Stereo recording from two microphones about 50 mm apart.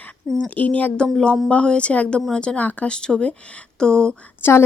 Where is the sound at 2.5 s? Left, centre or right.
Left.